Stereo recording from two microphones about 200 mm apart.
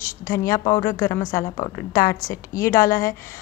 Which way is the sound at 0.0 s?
15° left (ahead or behind).